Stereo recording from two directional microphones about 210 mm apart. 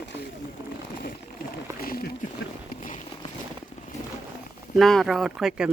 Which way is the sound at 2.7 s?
35° left (ahead or behind).